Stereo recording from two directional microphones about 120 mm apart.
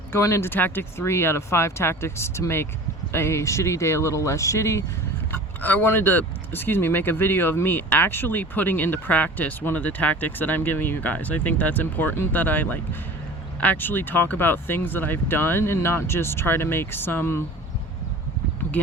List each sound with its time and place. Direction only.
0.1 s speech: 25° left (ahead or behind)